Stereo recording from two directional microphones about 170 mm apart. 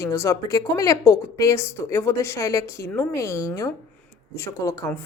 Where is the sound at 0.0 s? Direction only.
15° left (ahead or behind).